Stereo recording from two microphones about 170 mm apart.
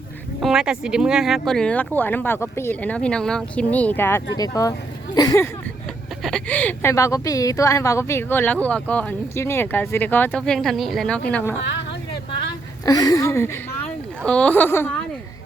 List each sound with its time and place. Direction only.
0.3 s speech: centre (ahead or behind); by 5.5 s 20° left (ahead or behind)
6.2 s speech: 5° left (ahead or behind)
11.7 s vehicle: 90° left
12.8 s speech: 20° left (ahead or behind)